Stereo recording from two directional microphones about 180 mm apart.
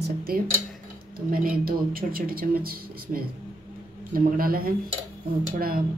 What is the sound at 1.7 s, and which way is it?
A woman's voice, 55° right (ahead or behind).